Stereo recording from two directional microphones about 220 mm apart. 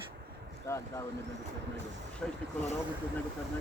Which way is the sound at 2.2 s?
5° left (ahead or behind).